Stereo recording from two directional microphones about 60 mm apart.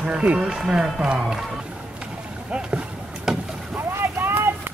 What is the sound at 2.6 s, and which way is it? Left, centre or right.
Basketball bounce, centre.